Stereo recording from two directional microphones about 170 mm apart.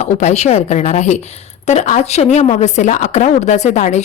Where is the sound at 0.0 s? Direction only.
45° left (ahead or behind).